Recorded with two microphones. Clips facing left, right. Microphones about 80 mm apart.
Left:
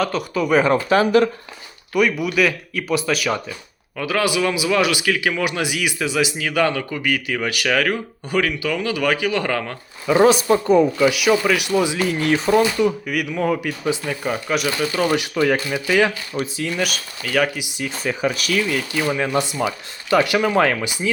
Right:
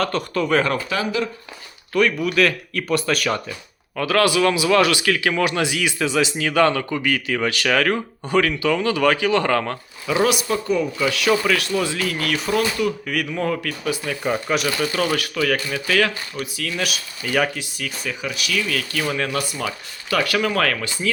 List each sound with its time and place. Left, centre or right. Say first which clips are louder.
0.0 s speech: left 1 dB; centre
0.9 s speech: left 8 dB; left
1.9 s speech: even; centre
10.1 s speech: left 5 dB; left
10.9 s speech: left 3 dB; centre
13.1 s speech: left 2 dB; centre
14.3 s speech: right 1 dB; centre
14.8 s speech: left 2 dB; centre
16.7 s speech: left 2 dB; centre
18.0 s speech: left 7 dB; left
18.7 s speech: left 3 dB; centre